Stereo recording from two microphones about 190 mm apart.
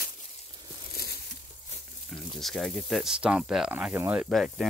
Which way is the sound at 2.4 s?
Centre (ahead or behind).